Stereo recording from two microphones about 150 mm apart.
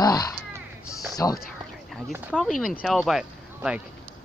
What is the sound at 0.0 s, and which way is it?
Crow, 25° left (ahead or behind).